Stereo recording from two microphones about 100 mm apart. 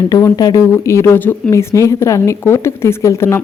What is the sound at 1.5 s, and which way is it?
A woman's voice, 30° left (ahead or behind).